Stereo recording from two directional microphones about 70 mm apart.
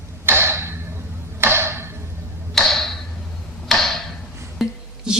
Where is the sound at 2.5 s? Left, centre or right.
Centre.